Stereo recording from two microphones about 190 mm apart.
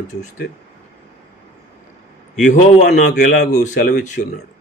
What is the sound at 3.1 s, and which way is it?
Speech, 60° left (ahead or behind).